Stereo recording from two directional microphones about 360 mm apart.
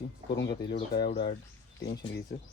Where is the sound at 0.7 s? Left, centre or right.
Left.